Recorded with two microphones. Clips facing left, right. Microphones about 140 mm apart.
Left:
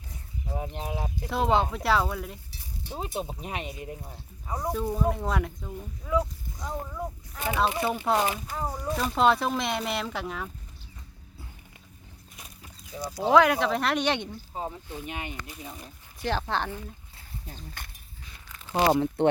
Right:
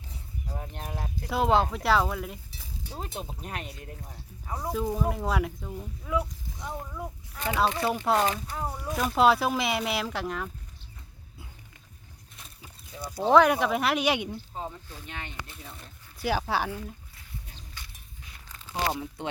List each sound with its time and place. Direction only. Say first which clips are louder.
0.4 s a sound: left 6 dB; 10° left (ahead or behind)
0.9 s speech: left 4 dB; 10° left (ahead or behind)
1.3 s speech: right 1 dB; centre (ahead or behind)
7.3 s speech: even; 10° left (ahead or behind)
8.5 s speech: left 1 dB; centre (ahead or behind)
12.4 s livestock: left 1 dB; centre (ahead or behind)
13.5 s speech: even; 10° right (ahead or behind)
14.5 s speech: left 3 dB; 15° left (ahead or behind)
15.4 s speech: left 4 dB; 5° left (ahead or behind)
16.2 s speech: right 1 dB; 10° right (ahead or behind)
17.5 s a sound: left 5 dB; 50° left (ahead or behind)
18.7 s speech: left 8 dB; 70° left (ahead or behind)